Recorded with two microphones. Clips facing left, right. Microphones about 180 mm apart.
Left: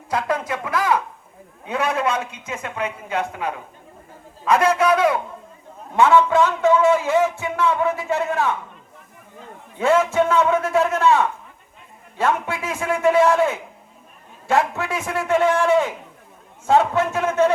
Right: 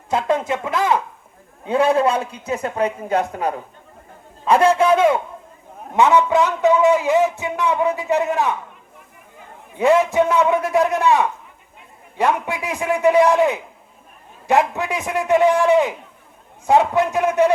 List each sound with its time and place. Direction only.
0.1 s a man's voice: 25° right (ahead or behind); by 3.5 s 40° right (ahead or behind)
4.4 s a man's voice: 30° right (ahead or behind)
9.7 s a man's voice: 15° right (ahead or behind)